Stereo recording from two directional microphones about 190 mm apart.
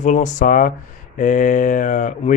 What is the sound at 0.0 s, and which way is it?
Speech, 40° left (ahead or behind).